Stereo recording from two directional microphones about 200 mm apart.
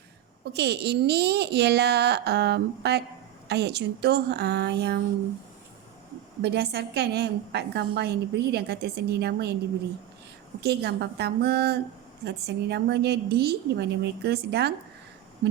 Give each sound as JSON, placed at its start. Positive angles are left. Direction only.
{"t": 0.5, "sound": "a woman's voice", "side_deg": -55}
{"t": 6.4, "sound": "a woman's voice", "side_deg": -55}
{"t": 10.6, "sound": "a woman's voice", "side_deg": -55}